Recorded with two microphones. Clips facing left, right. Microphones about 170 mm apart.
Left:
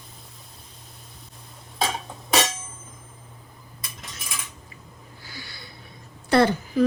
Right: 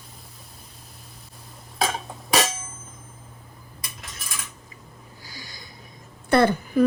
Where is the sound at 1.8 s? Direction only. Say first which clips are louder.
Right 1 dB; centre (ahead or behind).